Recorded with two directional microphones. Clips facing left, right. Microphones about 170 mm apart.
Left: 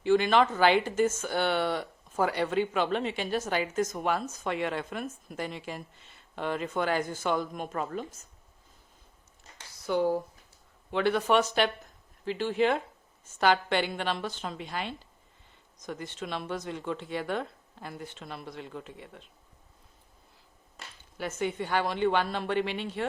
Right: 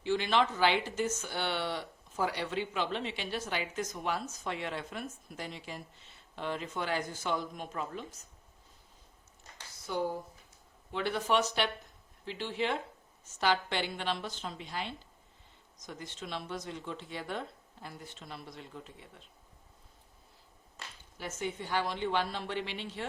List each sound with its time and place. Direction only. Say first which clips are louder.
0.0 s speech: left 6 dB; 50° left (ahead or behind)
9.8 s speech: left 7 dB; 70° left (ahead or behind)
15.9 s speech: left 5 dB; 60° left (ahead or behind); by 19.0 s 80° left
21.2 s speech: left 6 dB; 60° left (ahead or behind)